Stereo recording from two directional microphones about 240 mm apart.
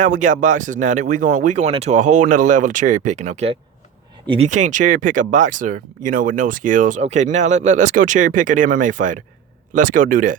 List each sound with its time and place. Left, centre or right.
0.0 s speech: right